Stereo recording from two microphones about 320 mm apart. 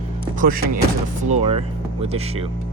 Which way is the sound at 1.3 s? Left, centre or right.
Centre.